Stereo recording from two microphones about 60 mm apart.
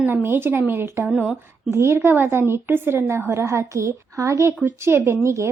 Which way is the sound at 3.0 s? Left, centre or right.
Right.